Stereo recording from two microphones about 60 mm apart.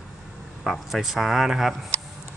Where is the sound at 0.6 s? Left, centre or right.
Centre.